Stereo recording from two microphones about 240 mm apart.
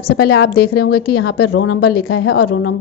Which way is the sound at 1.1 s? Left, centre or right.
Left.